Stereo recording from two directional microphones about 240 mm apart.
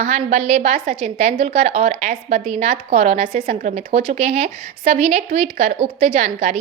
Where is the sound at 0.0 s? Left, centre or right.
Right.